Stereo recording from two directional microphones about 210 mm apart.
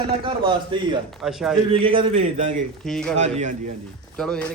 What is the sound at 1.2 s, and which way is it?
Speech, centre (ahead or behind).